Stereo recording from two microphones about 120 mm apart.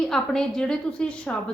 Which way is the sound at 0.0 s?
5° left (ahead or behind).